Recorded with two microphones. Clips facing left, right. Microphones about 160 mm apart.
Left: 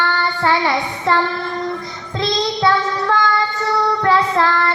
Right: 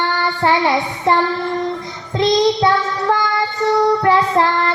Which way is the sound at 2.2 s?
20° right (ahead or behind).